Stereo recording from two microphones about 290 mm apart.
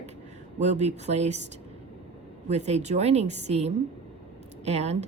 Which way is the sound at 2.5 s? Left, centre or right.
Right.